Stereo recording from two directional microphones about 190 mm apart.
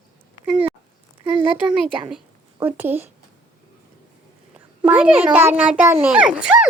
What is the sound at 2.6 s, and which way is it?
Speech, 10° right (ahead or behind).